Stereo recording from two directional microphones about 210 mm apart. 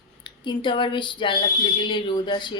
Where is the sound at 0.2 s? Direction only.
20° left (ahead or behind).